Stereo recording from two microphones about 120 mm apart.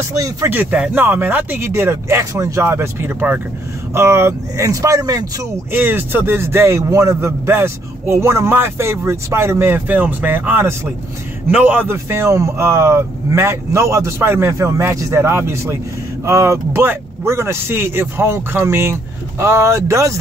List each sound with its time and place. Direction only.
0.5 s a man's voice: 15° right (ahead or behind)
5.7 s a man's voice: 15° right (ahead or behind)